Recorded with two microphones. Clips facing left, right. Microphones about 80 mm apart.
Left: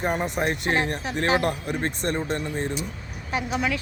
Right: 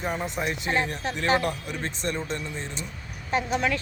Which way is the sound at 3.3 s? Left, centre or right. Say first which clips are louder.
Right 1 dB; centre.